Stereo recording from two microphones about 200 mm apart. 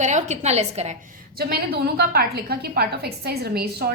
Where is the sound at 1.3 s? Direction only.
50° right (ahead or behind).